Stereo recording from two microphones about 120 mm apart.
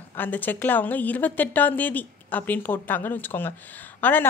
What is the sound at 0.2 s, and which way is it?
A woman's voice, 15° left (ahead or behind).